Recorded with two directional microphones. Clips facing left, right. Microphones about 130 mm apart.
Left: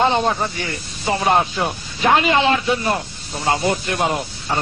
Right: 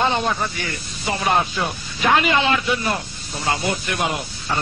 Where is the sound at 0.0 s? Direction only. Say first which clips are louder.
Left 3 dB; 30° left (ahead or behind).